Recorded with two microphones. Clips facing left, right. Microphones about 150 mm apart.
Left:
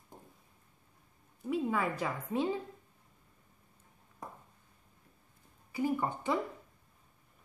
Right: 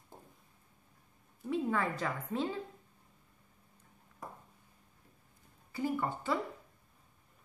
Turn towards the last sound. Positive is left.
turn(degrees=15)  # may be behind; listen again after turning